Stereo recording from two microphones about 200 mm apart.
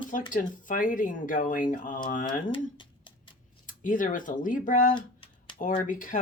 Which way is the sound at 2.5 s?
25° left (ahead or behind).